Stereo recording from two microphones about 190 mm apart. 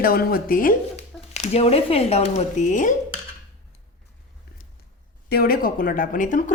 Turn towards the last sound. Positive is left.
turn(degrees=45)  # may be behind; listen again after turning